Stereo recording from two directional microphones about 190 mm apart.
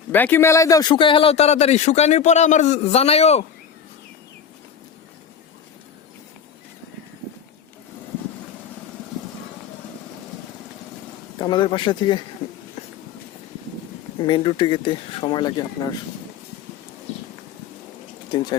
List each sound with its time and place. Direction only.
0.1 s speech: 10° left (ahead or behind); by 3.4 s 35° left (ahead or behind)
11.3 s speech: 25° left (ahead or behind)
14.2 s speech: 25° left (ahead or behind)